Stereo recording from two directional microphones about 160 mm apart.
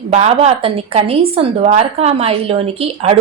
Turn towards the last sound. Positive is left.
turn(degrees=-40)  # may be behind; listen again after turning